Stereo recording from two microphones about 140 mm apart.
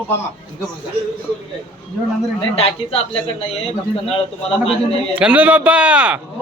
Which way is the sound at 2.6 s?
45° left (ahead or behind).